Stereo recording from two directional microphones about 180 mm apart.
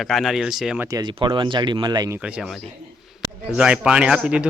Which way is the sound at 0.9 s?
20° right (ahead or behind).